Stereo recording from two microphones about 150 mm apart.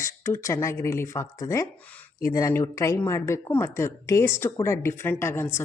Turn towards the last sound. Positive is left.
turn(degrees=15)  # may be behind; listen again after turning